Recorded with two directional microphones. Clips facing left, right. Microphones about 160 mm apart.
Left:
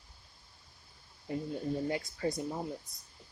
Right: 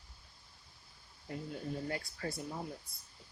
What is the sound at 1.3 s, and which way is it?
Speech, 20° left (ahead or behind).